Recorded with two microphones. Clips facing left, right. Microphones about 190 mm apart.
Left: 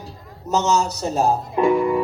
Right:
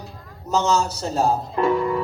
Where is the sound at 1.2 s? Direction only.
15° left (ahead or behind).